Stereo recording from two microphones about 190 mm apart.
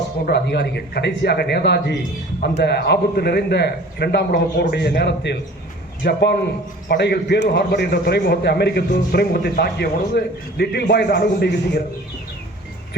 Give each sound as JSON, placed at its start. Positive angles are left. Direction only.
{"t": 0.3, "sound": "a man's voice", "side_deg": 60}